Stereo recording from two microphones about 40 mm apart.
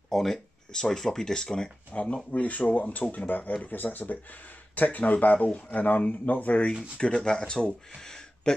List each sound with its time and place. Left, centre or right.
0.1 s speech: centre
1.9 s speech: left
7.0 s speech: left